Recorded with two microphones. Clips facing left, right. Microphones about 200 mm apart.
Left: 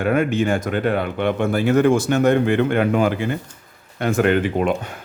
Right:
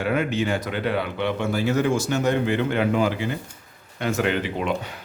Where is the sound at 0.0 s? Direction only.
50° left (ahead or behind).